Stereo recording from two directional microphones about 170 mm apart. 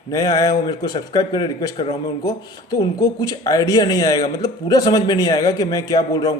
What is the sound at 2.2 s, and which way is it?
Speech, 20° left (ahead or behind).